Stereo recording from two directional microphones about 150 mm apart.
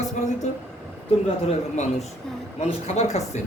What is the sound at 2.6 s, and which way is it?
Speech, 45° left (ahead or behind).